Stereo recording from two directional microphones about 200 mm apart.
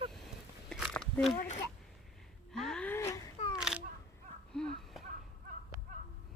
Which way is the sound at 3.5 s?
5° right (ahead or behind).